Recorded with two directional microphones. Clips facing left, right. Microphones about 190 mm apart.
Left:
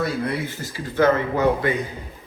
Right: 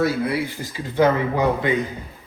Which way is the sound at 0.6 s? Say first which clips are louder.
Even; 15° right (ahead or behind).